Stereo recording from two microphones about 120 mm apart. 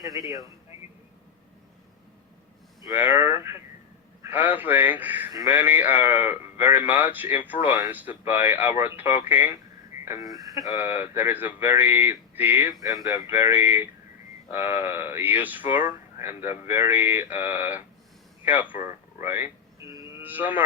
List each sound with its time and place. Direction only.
0.0 s speech: 30° right (ahead or behind)
3.0 s a man's voice: 15° right (ahead or behind)
10.1 s speech: 30° right (ahead or behind)
11.1 s a man's voice: 15° right (ahead or behind)
12.8 s speech: 30° right (ahead or behind)
13.3 s a man's voice: 15° right (ahead or behind)
19.9 s a sound: 20° right (ahead or behind)